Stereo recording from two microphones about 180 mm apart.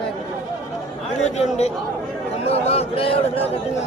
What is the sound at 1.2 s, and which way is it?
A man's voice, 35° left (ahead or behind).